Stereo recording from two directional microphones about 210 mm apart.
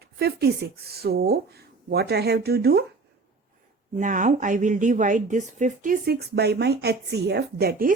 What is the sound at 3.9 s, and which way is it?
A woman's voice, 40° right (ahead or behind).